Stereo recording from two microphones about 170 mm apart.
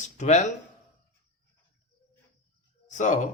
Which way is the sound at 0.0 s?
45° left (ahead or behind).